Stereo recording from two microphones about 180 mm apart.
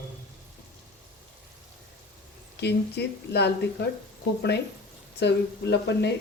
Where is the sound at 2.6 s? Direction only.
70° left (ahead or behind).